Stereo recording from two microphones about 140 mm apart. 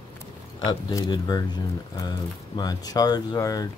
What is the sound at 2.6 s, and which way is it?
Speech, 25° left (ahead or behind).